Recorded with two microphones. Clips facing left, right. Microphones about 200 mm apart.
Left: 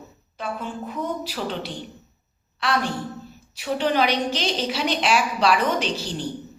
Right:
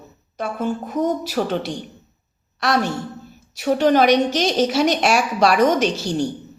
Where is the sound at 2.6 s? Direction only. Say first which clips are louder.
Right 4 dB; 45° right (ahead or behind).